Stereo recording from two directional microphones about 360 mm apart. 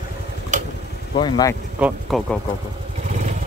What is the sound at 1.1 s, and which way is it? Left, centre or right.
Speech, centre.